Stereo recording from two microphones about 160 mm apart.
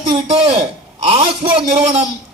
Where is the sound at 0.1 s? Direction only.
35° right (ahead or behind).